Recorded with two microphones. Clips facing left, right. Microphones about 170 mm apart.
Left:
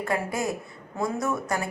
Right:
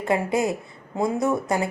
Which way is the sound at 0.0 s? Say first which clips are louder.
Right 5 dB; 20° right (ahead or behind).